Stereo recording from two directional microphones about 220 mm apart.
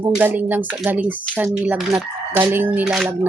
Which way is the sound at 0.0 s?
10° right (ahead or behind).